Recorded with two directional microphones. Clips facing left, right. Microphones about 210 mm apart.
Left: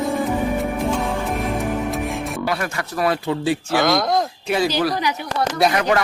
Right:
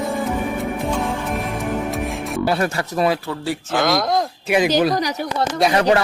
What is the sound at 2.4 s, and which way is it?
Speech, 30° right (ahead or behind).